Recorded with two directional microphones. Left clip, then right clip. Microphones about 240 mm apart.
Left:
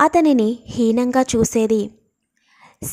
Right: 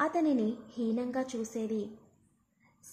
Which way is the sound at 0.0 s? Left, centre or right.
Left.